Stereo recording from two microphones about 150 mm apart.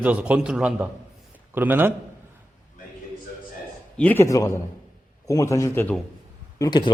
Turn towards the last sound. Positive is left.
turn(degrees=30)  # may be behind; listen again after turning